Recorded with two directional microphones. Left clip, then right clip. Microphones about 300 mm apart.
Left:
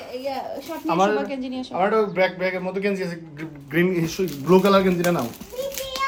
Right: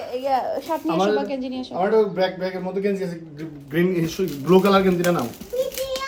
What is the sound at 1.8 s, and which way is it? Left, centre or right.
Speech, left.